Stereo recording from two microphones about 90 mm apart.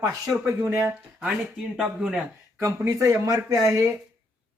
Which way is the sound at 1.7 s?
Centre (ahead or behind).